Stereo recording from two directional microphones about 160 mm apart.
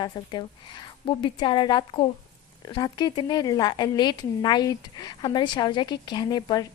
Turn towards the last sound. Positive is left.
turn(degrees=25)  # may be behind; listen again after turning